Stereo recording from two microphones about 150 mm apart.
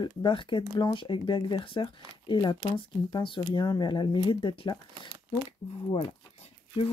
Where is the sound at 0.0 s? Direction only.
35° left (ahead or behind).